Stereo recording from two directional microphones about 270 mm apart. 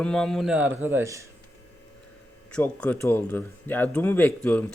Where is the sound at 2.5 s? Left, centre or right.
Centre.